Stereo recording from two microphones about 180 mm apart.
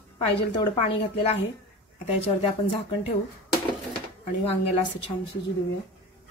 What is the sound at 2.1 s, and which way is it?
Speech, 35° left (ahead or behind).